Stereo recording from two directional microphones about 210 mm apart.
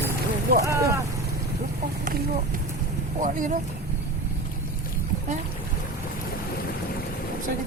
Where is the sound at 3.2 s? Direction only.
40° right (ahead or behind).